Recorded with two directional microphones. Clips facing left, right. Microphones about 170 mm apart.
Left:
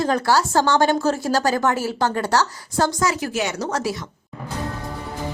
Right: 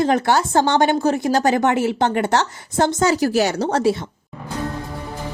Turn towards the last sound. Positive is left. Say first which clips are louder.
# right 6 dB
turn(degrees=-30)  # may be behind; listen again after turning